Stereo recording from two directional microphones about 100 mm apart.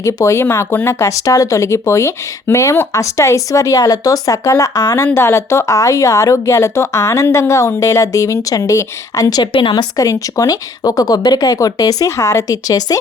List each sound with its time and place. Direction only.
0.0 s speech: 30° left (ahead or behind)
9.5 s a woman's voice: 60° left (ahead or behind)
9.7 s speech: 35° left (ahead or behind)